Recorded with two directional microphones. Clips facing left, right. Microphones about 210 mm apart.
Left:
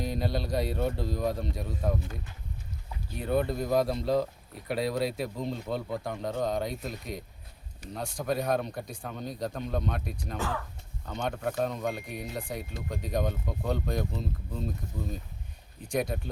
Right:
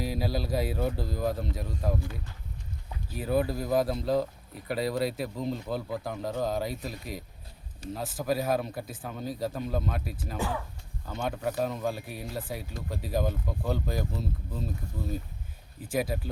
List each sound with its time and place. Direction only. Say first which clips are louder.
0.0 s speech: even; 5° right (ahead or behind)
3.2 s speech: even; 5° right (ahead or behind)
15.8 s speech: even; 5° right (ahead or behind)